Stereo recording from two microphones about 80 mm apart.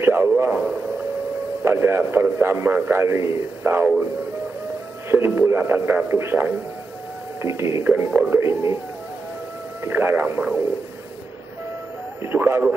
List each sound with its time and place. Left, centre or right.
0.0 s a man's voice: right
1.6 s a man's voice: right
5.1 s a man's voice: right
7.9 s a man's voice: right
8.4 s speech: right
9.8 s a man's voice: right
12.2 s a man's voice: right